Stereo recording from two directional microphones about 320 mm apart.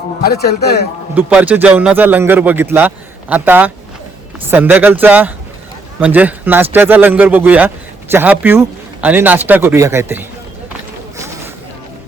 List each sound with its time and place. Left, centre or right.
0.3 s a man's voice: left
1.1 s a man's voice: centre